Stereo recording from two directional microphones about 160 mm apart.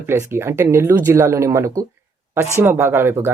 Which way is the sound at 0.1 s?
15° right (ahead or behind).